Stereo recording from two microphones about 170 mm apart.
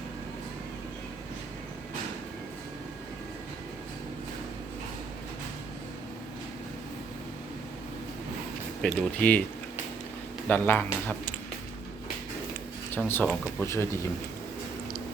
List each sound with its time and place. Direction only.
8.8 s speech: 10° left (ahead or behind)
10.5 s speech: 10° left (ahead or behind)
12.9 s speech: 10° left (ahead or behind)